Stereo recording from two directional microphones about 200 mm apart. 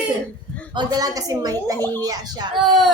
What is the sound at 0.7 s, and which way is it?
A woman's voice, 20° right (ahead or behind).